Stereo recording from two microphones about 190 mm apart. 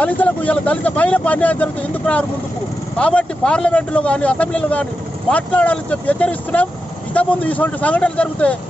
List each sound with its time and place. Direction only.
0.0 s speech: 10° left (ahead or behind)